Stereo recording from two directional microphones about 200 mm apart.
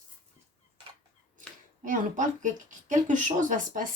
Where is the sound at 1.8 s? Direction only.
40° right (ahead or behind).